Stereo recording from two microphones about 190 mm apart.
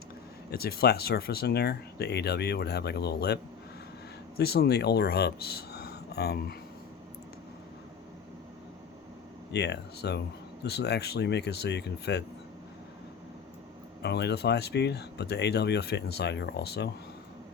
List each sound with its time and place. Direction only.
0.5 s speech: 55° left (ahead or behind)
9.5 s speech: 60° left (ahead or behind)
14.0 s speech: 60° left (ahead or behind)